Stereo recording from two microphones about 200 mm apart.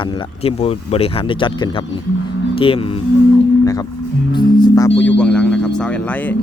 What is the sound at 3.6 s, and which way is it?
Music, 15° left (ahead or behind).